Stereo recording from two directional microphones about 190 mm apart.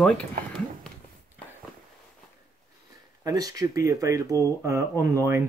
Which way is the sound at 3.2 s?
20° right (ahead or behind).